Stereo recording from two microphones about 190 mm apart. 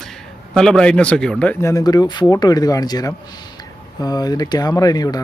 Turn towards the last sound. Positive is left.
turn(degrees=20)  # may be behind; listen again after turning